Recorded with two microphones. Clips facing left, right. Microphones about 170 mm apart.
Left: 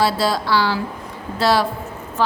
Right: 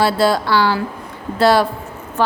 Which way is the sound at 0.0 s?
60° right (ahead or behind).